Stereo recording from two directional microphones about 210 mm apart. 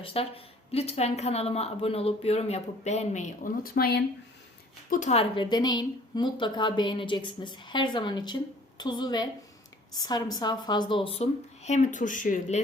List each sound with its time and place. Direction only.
0.0 s a woman's voice: 25° left (ahead or behind); by 4.0 s 45° left (ahead or behind)
4.9 s speech: 35° left (ahead or behind)
5.4 s a woman's voice: 20° left (ahead or behind); by 12.6 s 35° left (ahead or behind)